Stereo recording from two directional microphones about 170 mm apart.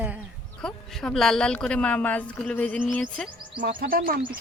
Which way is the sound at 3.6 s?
60° right (ahead or behind).